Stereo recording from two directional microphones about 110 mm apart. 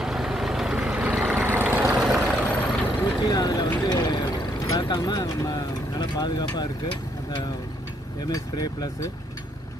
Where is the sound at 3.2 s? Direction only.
35° left (ahead or behind).